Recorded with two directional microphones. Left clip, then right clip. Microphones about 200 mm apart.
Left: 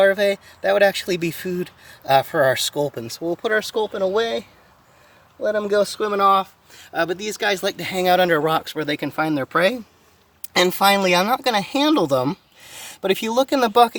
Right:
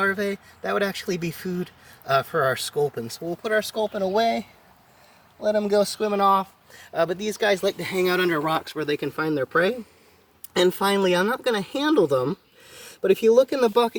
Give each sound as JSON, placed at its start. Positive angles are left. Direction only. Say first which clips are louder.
{"t": 0.0, "sound": "speech", "louder": "left 8 dB", "side_deg": 50}
{"t": 5.6, "sound": "speech", "louder": "left 2 dB", "side_deg": 40}